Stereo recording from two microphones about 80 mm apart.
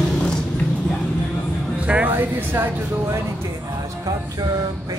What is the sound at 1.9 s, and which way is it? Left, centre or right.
Speech, right.